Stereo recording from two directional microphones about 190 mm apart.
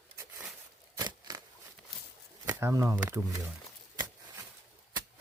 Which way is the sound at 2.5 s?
10° right (ahead or behind).